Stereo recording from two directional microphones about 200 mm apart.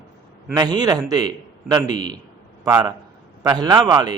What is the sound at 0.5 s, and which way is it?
A man's voice, 20° right (ahead or behind).